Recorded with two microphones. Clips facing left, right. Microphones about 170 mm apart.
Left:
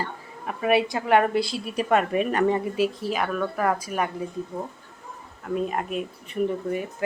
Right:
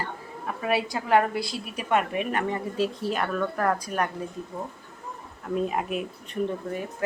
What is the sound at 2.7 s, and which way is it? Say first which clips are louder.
Speech: left 2 dB; 5° left (ahead or behind).